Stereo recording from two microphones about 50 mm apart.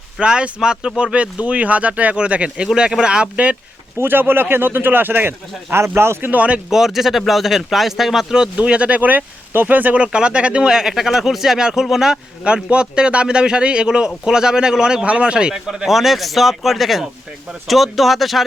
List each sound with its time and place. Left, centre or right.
0.2 s speech: right
4.0 s speech: right
5.7 s speech: right
6.7 s speech: centre
8.5 s speech: right
10.0 s a man's voice: right
12.6 s a man's voice: right; by 18.4 s centre